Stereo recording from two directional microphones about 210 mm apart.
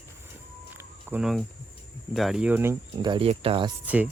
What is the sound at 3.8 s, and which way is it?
Speech, 5° right (ahead or behind).